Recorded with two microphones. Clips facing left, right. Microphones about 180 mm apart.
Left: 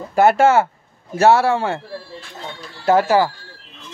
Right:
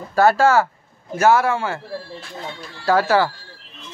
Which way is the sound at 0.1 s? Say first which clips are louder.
Left 2 dB; 20° left (ahead or behind).